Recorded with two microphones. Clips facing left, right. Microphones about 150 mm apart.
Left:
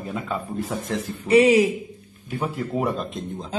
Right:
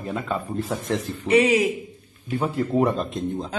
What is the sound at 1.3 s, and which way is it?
Speech, 35° left (ahead or behind).